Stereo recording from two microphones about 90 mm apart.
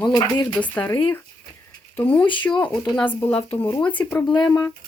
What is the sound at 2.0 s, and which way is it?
Speech, 20° left (ahead or behind).